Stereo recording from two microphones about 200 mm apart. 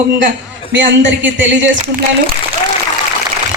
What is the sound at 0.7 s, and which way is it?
Speech, 65° right (ahead or behind).